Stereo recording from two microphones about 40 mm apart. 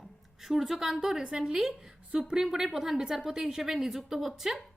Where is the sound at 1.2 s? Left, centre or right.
Centre.